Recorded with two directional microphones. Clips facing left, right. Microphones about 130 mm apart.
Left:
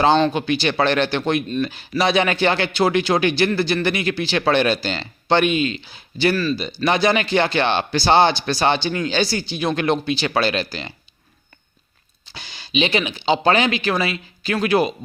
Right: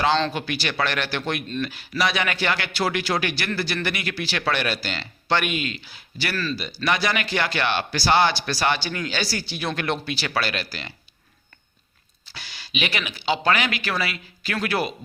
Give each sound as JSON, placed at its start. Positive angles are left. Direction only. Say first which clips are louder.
{"t": 0.2, "sound": "speech", "louder": "left 7 dB", "side_deg": 20}
{"t": 6.3, "sound": "speech", "louder": "left 6 dB", "side_deg": 15}
{"t": 6.6, "sound": "speech", "louder": "left 5 dB", "side_deg": 25}
{"t": 12.2, "sound": "speech", "louder": "left 3 dB", "side_deg": 20}